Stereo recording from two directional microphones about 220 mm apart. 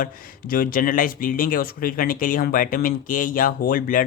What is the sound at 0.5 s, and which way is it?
Speech, 40° left (ahead or behind).